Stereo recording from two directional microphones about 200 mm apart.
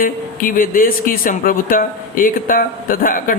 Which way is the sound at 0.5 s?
45° left (ahead or behind).